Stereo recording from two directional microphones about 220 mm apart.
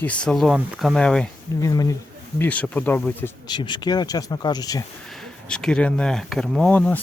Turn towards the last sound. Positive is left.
turn(degrees=5)  # may be behind; listen again after turning